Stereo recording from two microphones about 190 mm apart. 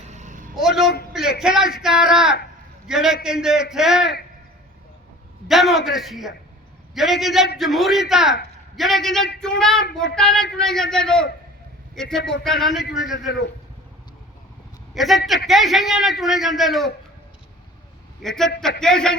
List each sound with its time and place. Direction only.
0.1 s a sound: 40° right (ahead or behind)
0.5 s a sound: centre (ahead or behind)
1.8 s a man's voice: 5° right (ahead or behind)
5.5 s a man's voice: centre (ahead or behind)
14.9 s a man's voice: centre (ahead or behind)
18.2 s a man's voice: centre (ahead or behind)